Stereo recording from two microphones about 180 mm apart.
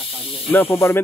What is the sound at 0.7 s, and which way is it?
Speech, 15° left (ahead or behind).